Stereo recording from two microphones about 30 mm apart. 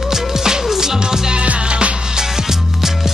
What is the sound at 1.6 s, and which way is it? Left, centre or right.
Music, right.